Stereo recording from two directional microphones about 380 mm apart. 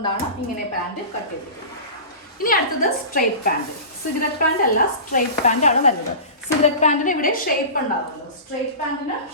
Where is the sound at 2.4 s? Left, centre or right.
Left.